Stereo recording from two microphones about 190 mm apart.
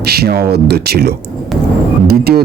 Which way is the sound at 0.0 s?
55° right (ahead or behind).